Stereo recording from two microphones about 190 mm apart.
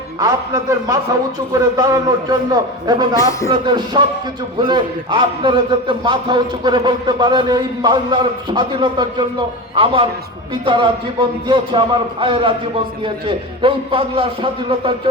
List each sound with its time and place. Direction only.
0.2 s a man's voice: 20° right (ahead or behind)